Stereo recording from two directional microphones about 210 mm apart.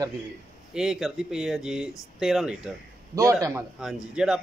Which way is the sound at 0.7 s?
5° right (ahead or behind).